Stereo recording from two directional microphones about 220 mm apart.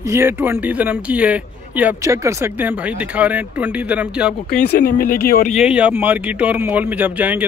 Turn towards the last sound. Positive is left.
turn(degrees=-5)  # may be behind; listen again after turning